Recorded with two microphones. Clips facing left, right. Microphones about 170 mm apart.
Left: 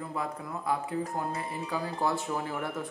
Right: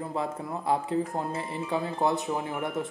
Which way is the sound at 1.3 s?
25° right (ahead or behind).